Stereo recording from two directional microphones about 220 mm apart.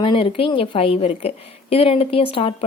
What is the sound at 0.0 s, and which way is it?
A woman's voice, 25° left (ahead or behind).